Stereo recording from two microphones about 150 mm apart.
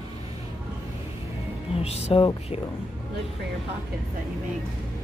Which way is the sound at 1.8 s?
40° left (ahead or behind).